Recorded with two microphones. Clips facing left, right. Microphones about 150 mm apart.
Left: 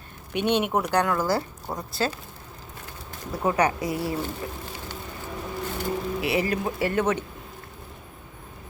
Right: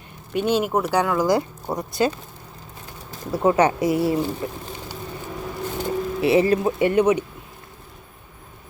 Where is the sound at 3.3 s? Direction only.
25° right (ahead or behind).